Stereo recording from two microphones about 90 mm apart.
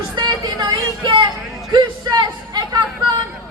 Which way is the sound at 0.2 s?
60° right (ahead or behind).